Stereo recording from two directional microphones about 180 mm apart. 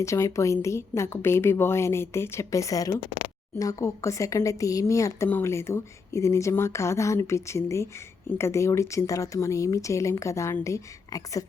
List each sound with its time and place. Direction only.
0.0 s a woman's voice: 15° left (ahead or behind)